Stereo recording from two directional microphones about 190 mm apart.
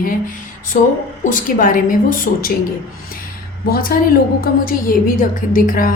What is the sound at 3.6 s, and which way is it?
Speech, 50° left (ahead or behind).